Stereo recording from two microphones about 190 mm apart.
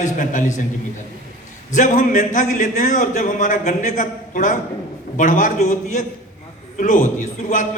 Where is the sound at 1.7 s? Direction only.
40° left (ahead or behind).